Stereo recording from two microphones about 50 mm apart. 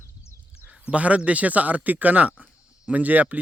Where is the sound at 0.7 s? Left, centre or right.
Right.